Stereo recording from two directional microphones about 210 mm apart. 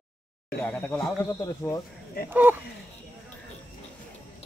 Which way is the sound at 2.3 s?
10° right (ahead or behind).